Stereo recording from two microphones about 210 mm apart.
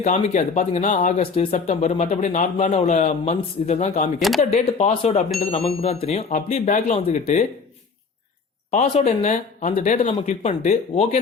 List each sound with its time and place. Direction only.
0.0 s speech: 35° left (ahead or behind)
8.7 s speech: 35° left (ahead or behind)